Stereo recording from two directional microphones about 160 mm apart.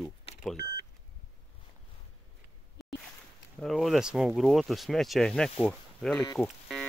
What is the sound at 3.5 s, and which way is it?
Speech, centre (ahead or behind).